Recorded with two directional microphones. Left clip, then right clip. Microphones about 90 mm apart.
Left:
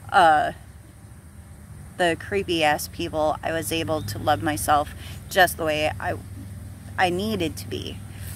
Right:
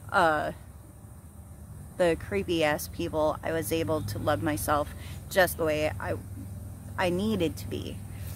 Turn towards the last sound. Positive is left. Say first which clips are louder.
# left 2 dB
turn(degrees=-30)  # may be behind; listen again after turning